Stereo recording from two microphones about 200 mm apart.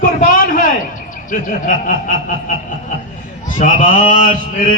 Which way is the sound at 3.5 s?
40° left (ahead or behind).